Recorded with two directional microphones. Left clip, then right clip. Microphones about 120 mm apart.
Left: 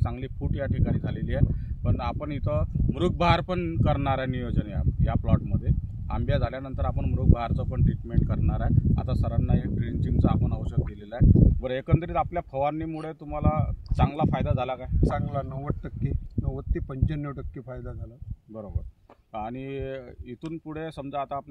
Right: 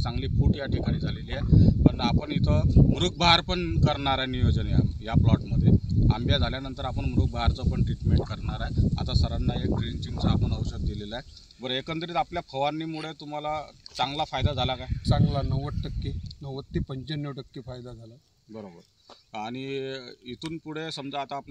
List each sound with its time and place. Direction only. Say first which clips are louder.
0.0 s speech: right 3 dB; 25° left (ahead or behind)
3.2 s speech: right 3 dB; 30° left (ahead or behind)
14.9 s speech: even; centre (ahead or behind)
19.3 s speech: right 1 dB; 35° left (ahead or behind)